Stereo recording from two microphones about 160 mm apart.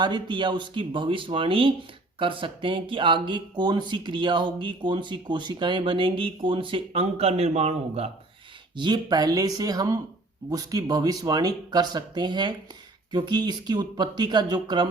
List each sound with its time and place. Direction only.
0.0 s speech: 30° right (ahead or behind)
8.7 s speech: 30° right (ahead or behind)